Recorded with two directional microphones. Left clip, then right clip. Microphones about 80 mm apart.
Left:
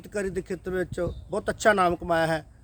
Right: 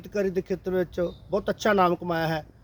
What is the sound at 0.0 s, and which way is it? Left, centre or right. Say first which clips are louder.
A man's voice: right 3 dB; left.